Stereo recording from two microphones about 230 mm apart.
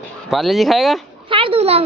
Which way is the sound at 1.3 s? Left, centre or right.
Right.